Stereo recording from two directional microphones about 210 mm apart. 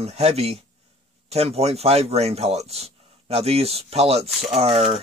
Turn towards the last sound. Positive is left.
turn(degrees=-25)  # may be behind; listen again after turning